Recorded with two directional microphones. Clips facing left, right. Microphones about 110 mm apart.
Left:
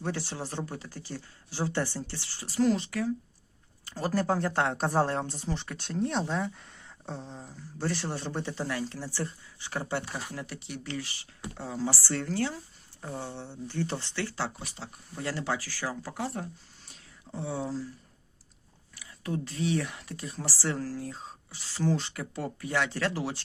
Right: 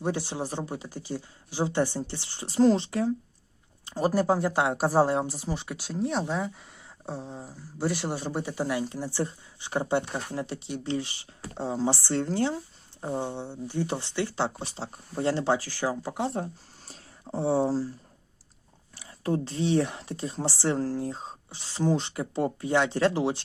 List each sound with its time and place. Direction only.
0.0 s speech: 15° right (ahead or behind)
16.8 s a sound: 35° right (ahead or behind)
18.9 s speech: 30° right (ahead or behind)